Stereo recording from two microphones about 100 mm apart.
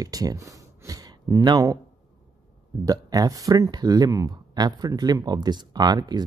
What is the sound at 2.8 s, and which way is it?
Speech, 40° right (ahead or behind).